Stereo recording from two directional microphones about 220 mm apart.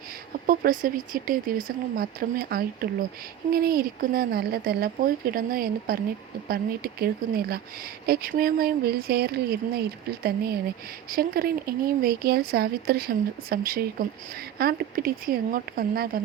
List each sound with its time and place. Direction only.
0.4 s speech: 40° right (ahead or behind)